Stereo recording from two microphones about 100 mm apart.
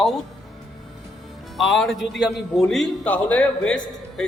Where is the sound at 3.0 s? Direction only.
15° left (ahead or behind).